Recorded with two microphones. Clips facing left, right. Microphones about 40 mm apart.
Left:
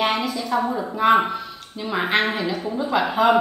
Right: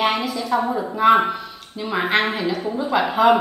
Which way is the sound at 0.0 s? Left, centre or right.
Centre.